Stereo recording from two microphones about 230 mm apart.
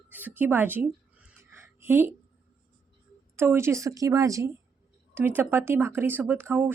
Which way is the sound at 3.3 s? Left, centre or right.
Centre.